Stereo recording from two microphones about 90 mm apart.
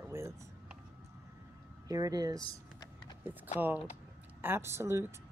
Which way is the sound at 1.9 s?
40° right (ahead or behind).